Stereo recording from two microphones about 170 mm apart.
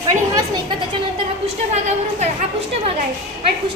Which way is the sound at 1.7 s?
40° right (ahead or behind).